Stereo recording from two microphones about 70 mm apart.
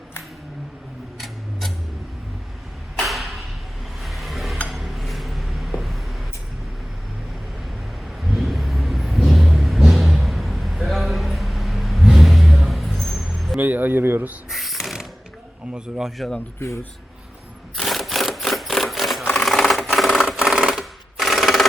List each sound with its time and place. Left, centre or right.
1.2 s tick-tock: centre
3.0 s a sound: centre
5.7 s vehicle: centre
8.2 s vehicle: centre
13.6 s speech: right
14.5 s a sound: centre
15.7 s speech: centre
16.6 s speech: left
17.7 s a sound: centre
20.2 s sewing machine: centre